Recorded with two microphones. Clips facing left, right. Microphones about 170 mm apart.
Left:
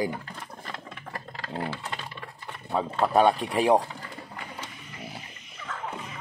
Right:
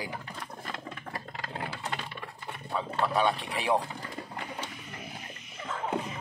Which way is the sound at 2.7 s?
45° left (ahead or behind).